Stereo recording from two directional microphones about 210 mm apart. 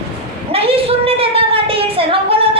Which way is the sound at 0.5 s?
25° right (ahead or behind).